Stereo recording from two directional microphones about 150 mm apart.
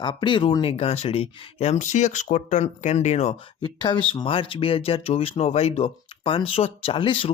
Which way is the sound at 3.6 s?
35° left (ahead or behind).